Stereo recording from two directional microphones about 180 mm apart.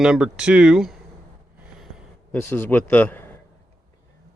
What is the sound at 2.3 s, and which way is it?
Speech, 10° left (ahead or behind).